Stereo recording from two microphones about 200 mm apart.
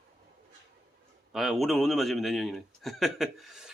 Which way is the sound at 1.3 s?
Centre (ahead or behind).